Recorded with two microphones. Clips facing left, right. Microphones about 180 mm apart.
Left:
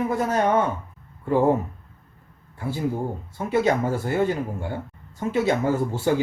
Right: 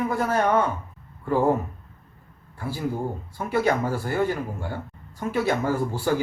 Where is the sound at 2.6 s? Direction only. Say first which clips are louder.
Left 2 dB; 20° left (ahead or behind).